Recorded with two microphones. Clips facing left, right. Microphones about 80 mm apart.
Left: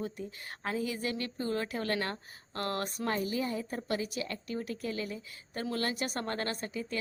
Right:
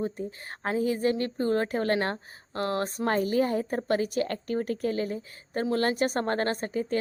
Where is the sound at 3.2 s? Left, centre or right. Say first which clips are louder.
Right 8 dB; right.